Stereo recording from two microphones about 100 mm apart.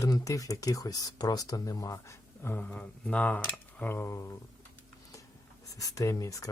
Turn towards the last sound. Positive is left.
turn(degrees=35)  # may be behind; listen again after turning